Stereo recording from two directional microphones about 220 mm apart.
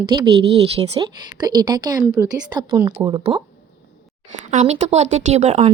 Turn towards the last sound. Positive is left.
turn(degrees=-30)  # may be behind; listen again after turning